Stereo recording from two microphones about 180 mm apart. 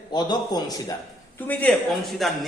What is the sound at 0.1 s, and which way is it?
Speech, 25° left (ahead or behind).